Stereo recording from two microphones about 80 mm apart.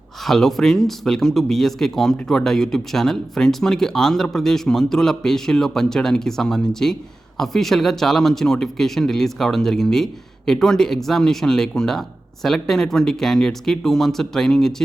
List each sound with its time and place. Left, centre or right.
0.2 s speech: centre